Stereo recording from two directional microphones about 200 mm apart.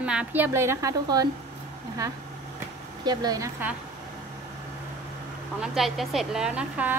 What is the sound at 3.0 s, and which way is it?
Speech, 20° right (ahead or behind).